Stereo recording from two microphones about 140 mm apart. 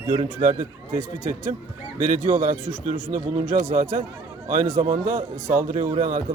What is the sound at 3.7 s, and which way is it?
A man's voice, 70° right (ahead or behind).